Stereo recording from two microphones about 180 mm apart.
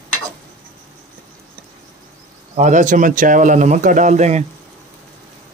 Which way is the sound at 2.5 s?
45° right (ahead or behind).